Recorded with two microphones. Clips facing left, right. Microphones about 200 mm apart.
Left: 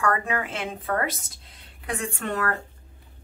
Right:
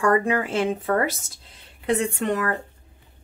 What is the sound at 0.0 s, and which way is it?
A woman's voice, 30° right (ahead or behind).